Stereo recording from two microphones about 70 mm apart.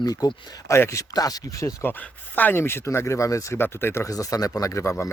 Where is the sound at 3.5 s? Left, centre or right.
Left.